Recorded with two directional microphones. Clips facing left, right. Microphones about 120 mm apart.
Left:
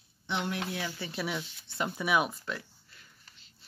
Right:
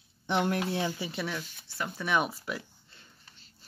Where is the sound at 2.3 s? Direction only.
15° right (ahead or behind).